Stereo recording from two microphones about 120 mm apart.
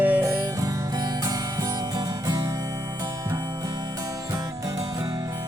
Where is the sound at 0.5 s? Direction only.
30° right (ahead or behind).